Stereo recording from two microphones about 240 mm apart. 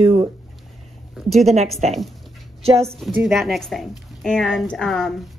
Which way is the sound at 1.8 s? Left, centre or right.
Right.